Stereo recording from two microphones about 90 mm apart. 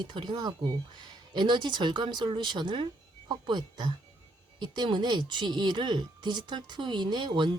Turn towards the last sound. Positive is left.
turn(degrees=-60)  # may be behind; listen again after turning